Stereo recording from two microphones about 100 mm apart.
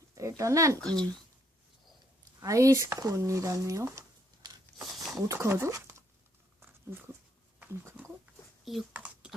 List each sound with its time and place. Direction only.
0.2 s speech: 30° right (ahead or behind)
0.8 s speech: 5° left (ahead or behind)
2.4 s speech: 30° right (ahead or behind)
4.8 s a sound: centre (ahead or behind)
5.3 s speech: 30° right (ahead or behind)
6.6 s a sound: 20° right (ahead or behind)
8.7 s speech: centre (ahead or behind)
9.2 s typing: 10° right (ahead or behind)